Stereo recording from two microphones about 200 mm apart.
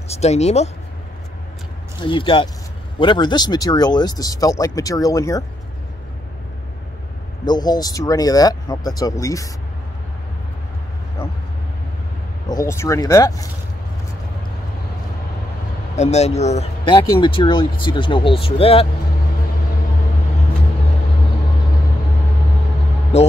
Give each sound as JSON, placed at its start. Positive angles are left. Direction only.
{"t": 0.1, "sound": "speech", "side_deg": 35}
{"t": 2.0, "sound": "speech", "side_deg": 25}
{"t": 7.4, "sound": "speech", "side_deg": 20}
{"t": 12.4, "sound": "speech", "side_deg": 15}
{"t": 16.0, "sound": "speech", "side_deg": 35}
{"t": 23.1, "sound": "heart sounds", "side_deg": 30}